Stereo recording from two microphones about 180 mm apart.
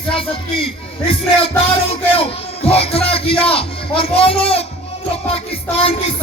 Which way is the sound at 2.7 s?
35° left (ahead or behind).